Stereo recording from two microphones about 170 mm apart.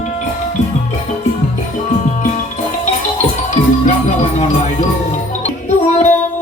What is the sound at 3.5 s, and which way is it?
Music, 45° left (ahead or behind).